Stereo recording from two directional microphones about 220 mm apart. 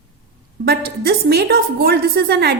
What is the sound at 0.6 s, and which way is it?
A woman's voice, 45° right (ahead or behind).